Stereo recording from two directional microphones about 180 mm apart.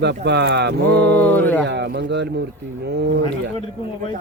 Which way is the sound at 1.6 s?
70° right (ahead or behind).